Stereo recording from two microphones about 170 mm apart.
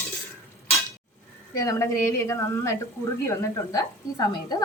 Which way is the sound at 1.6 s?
15° left (ahead or behind).